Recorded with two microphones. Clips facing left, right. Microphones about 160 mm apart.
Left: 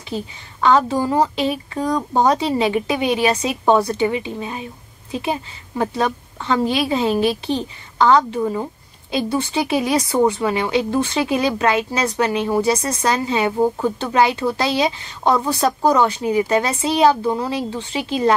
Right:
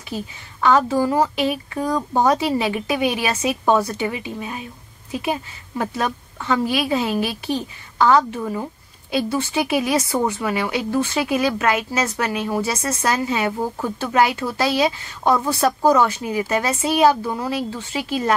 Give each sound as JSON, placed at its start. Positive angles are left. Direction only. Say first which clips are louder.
{"t": 0.1, "sound": "a woman's voice", "louder": "left 2 dB", "side_deg": 25}